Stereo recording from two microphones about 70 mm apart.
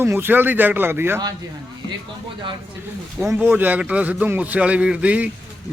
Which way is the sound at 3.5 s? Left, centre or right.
Right.